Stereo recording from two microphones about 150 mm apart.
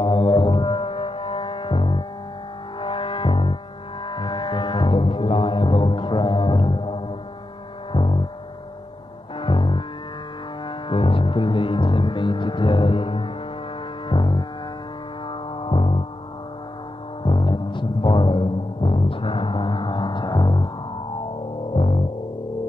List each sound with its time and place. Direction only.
0.0 s music: 30° left (ahead or behind)
7.9 s gong: 35° left (ahead or behind)
9.4 s music: 35° left (ahead or behind)
14.0 s foghorn: 30° left (ahead or behind)
15.2 s music: 35° left (ahead or behind)
17.2 s music: 30° left (ahead or behind)
21.7 s music: 35° left (ahead or behind)